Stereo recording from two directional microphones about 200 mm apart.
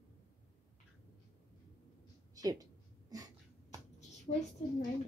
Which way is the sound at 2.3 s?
20° right (ahead or behind).